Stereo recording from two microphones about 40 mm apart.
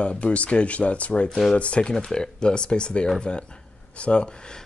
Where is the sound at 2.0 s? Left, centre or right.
Left.